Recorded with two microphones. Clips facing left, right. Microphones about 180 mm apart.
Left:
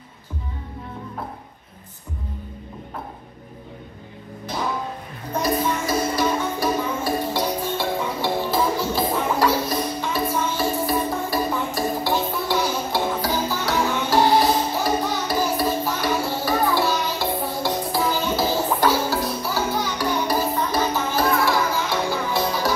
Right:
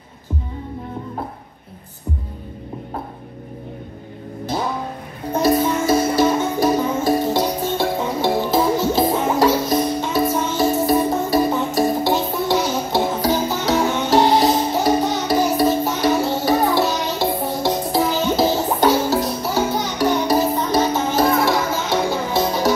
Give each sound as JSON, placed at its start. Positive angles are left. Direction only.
{"t": 5.3, "sound": "music", "side_deg": -25}